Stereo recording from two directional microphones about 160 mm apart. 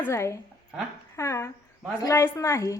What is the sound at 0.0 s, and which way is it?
A woman's voice, 15° left (ahead or behind).